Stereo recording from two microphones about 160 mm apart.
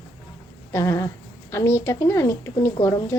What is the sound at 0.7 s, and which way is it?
A woman's voice, 20° left (ahead or behind).